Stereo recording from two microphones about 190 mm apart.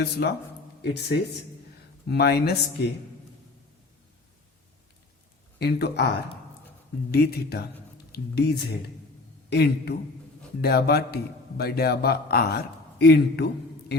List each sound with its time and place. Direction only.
0.0 s a man's voice: 60° left (ahead or behind)
5.5 s a man's voice: 60° left (ahead or behind)
7.1 s a man's voice: 55° left (ahead or behind)